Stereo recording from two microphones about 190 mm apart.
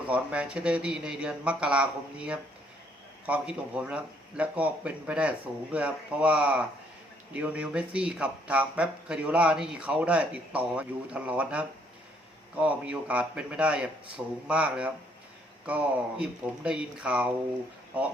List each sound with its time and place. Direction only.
0.1 s speech: 5° right (ahead or behind)